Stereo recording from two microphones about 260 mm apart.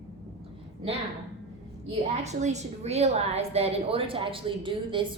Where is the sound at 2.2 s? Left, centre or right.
Right.